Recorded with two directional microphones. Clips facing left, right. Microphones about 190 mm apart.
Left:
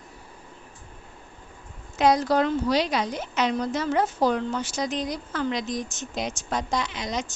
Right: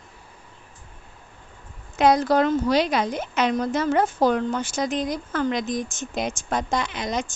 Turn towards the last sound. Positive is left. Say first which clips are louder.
# right 3 dB
turn(degrees=-50)  # may be behind; listen again after turning